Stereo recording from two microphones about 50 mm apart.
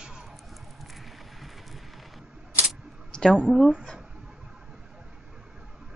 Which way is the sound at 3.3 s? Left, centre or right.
Centre.